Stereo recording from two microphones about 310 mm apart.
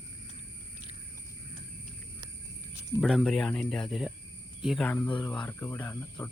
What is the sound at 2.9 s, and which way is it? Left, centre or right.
Speech, centre.